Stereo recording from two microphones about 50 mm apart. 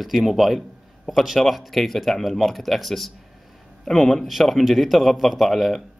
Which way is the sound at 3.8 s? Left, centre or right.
Centre.